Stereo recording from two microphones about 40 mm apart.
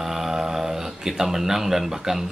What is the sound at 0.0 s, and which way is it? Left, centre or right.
Speech, centre.